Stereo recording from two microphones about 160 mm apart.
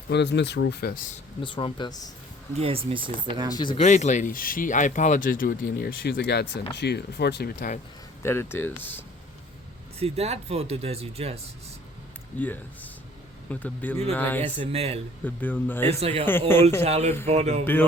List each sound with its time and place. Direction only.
0.1 s speech: 90° left; by 1.1 s 65° left (ahead or behind)
1.4 s speech: 30° left (ahead or behind)
2.6 s speech: 35° right (ahead or behind)
3.5 s speech: 30° left (ahead or behind)
3.8 s speech: 50° left (ahead or behind); by 7.8 s 65° left (ahead or behind)
8.2 s speech: 15° left (ahead or behind)
10.0 s speech: 40° right (ahead or behind)
12.4 s speech: 10° left (ahead or behind)
14.4 s speech: 40° right (ahead or behind)
15.2 s speech: 10° left (ahead or behind)
15.9 s speech: 40° right (ahead or behind)
16.5 s speech: 15° left (ahead or behind)
16.8 s speech: 45° right (ahead or behind)